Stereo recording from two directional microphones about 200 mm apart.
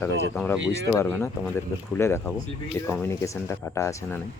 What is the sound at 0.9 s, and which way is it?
Speech, 10° left (ahead or behind).